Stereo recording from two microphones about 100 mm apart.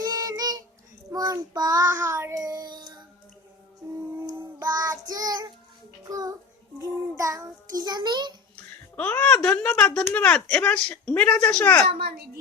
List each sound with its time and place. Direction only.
0.0 s child singing: 40° right (ahead or behind)
2.0 s child singing: 25° right (ahead or behind)
2.4 s child singing: 40° right (ahead or behind)
4.6 s child singing: 40° right (ahead or behind)
9.0 s speech: 15° left (ahead or behind)
9.7 s speech: 5° left (ahead or behind)
10.1 s speech: 20° left (ahead or behind)